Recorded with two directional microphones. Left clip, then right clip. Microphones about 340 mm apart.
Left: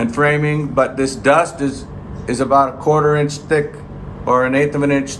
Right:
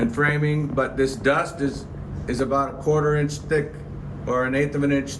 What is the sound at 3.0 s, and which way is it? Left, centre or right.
Speech, centre.